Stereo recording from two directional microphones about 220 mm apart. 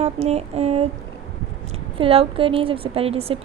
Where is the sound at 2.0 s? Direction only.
25° right (ahead or behind).